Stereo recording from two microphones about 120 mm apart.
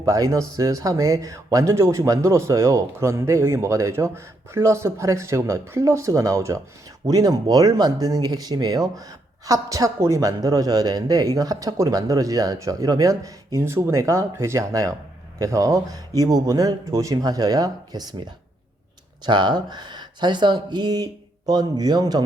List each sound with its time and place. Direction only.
0.0 s speech: 30° right (ahead or behind)
19.2 s speech: 40° right (ahead or behind)